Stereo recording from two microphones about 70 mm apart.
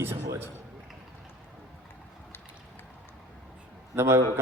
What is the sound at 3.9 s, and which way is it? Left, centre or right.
Speech, right.